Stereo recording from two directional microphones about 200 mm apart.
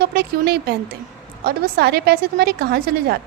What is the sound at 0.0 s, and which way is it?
A woman's voice, 50° right (ahead or behind).